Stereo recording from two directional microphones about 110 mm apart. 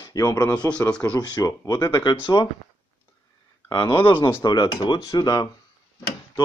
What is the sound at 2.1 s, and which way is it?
Speech, 50° left (ahead or behind).